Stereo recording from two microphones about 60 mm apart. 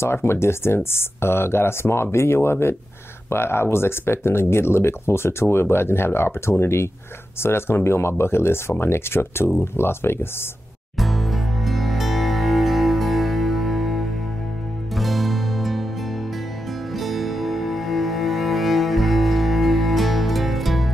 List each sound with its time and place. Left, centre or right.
0.0 s speech: left
11.0 s music: centre
16.9 s music: centre